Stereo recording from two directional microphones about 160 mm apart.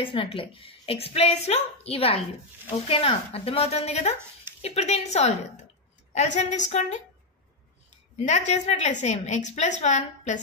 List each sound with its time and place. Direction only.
0.0 s a woman's voice: 35° left (ahead or behind); by 7.0 s 50° left (ahead or behind)
8.3 s a woman's voice: 45° left (ahead or behind)